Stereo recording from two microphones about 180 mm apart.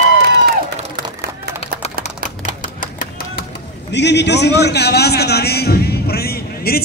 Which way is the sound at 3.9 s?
70° left (ahead or behind).